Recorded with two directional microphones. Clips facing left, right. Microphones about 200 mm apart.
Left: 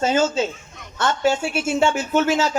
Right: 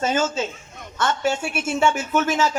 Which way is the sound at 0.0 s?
30° left (ahead or behind).